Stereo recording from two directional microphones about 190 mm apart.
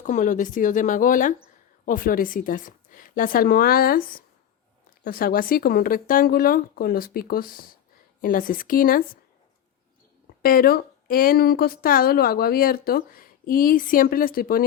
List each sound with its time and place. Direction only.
0.0 s speech: 40° left (ahead or behind)
10.4 s speech: 50° left (ahead or behind)